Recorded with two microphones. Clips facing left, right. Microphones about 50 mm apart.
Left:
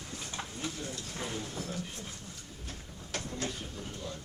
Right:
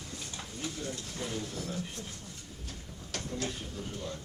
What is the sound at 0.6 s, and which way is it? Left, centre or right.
Speech, centre.